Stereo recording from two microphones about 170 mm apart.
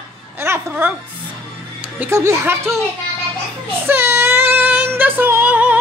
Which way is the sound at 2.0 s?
15° right (ahead or behind).